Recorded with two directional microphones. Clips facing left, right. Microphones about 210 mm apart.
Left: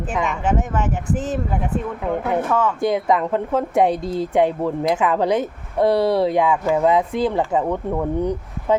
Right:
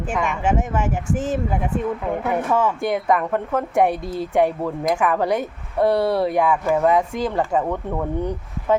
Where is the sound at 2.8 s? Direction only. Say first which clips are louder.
Left 2 dB; 20° left (ahead or behind).